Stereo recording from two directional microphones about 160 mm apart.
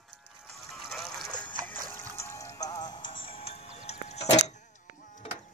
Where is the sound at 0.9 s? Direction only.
Centre (ahead or behind).